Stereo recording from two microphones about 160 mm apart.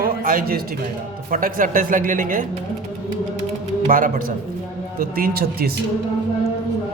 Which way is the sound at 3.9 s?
60° right (ahead or behind).